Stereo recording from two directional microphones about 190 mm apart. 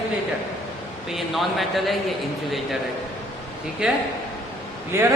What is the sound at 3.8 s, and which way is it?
A man's voice, 5° right (ahead or behind).